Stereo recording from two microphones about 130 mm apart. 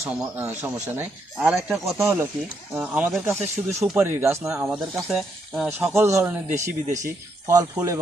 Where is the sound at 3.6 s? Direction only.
20° right (ahead or behind).